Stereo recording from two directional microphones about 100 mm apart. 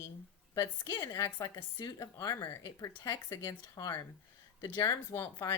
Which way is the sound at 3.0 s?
35° left (ahead or behind).